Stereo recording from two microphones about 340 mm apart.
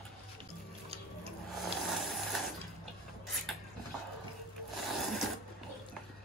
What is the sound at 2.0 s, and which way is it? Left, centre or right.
Sewing machine, centre.